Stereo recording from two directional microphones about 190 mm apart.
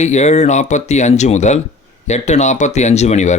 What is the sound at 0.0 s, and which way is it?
Speech, 35° left (ahead or behind).